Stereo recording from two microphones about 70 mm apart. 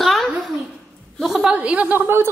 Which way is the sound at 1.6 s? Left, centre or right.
Centre.